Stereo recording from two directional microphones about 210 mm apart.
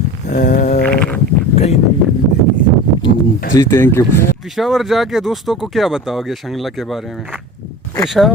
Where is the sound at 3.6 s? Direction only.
10° left (ahead or behind).